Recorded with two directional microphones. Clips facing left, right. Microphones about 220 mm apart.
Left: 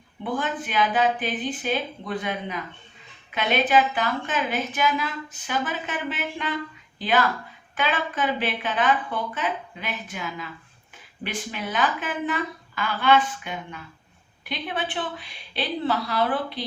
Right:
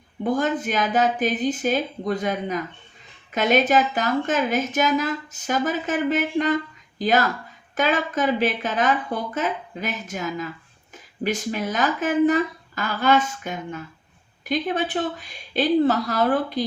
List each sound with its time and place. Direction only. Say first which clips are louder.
0.2 s a woman's voice: right 6 dB; 40° right (ahead or behind)